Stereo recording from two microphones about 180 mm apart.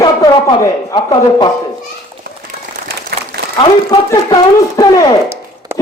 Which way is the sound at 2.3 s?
65° right (ahead or behind).